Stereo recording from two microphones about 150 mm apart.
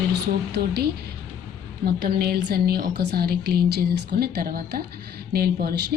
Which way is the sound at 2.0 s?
90° right.